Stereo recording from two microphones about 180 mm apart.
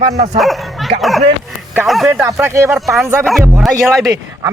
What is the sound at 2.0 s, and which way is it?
Speech, 15° right (ahead or behind).